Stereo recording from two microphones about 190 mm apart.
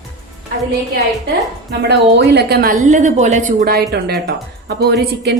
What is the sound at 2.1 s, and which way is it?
A woman's voice, 60° right (ahead or behind).